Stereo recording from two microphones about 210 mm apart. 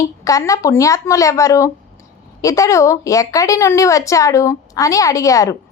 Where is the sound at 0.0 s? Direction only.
15° left (ahead or behind).